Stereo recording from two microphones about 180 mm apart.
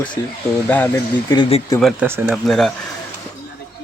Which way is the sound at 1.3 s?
30° left (ahead or behind).